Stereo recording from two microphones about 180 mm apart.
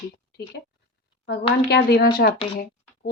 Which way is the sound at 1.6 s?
60° left (ahead or behind).